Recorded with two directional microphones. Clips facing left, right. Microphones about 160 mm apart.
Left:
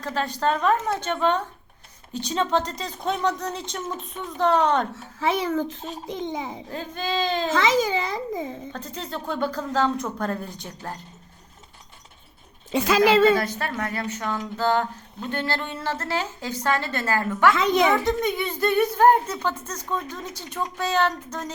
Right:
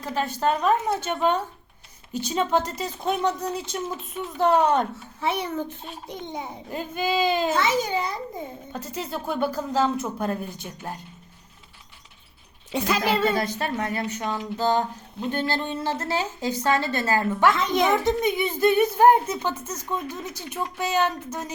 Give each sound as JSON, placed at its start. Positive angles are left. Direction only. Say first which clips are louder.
{"t": 0.0, "sound": "a woman's voice", "louder": "even", "side_deg": -15}
{"t": 5.2, "sound": "a child's voice", "louder": "left 3 dB", "side_deg": 90}
{"t": 6.7, "sound": "a woman's voice", "louder": "right 6 dB", "side_deg": -10}
{"t": 7.5, "sound": "a child's voice", "louder": "left 2 dB", "side_deg": 90}
{"t": 9.0, "sound": "a woman's voice", "louder": "right 1 dB", "side_deg": -10}
{"t": 12.9, "sound": "a child's voice", "louder": "left 6 dB", "side_deg": 90}
{"t": 13.4, "sound": "a woman's voice", "louder": "right 1 dB", "side_deg": -25}